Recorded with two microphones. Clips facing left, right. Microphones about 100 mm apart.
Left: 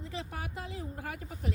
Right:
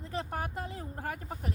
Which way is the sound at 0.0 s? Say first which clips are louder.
Right 4 dB; 45° right (ahead or behind).